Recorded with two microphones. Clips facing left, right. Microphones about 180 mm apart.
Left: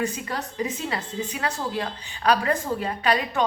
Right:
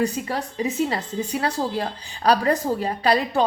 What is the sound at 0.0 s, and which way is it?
A woman's voice, 30° right (ahead or behind).